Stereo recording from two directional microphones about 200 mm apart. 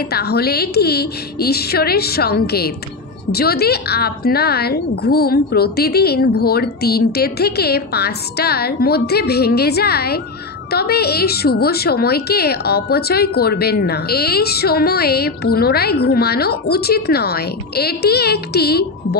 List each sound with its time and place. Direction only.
0.1 s a woman's voice: 50° left (ahead or behind)